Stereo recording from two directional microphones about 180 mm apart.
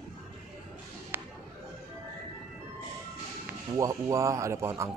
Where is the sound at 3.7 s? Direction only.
20° right (ahead or behind).